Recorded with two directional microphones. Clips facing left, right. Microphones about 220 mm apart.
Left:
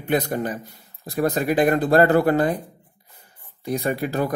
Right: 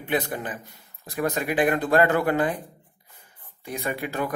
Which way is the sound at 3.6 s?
35° left (ahead or behind).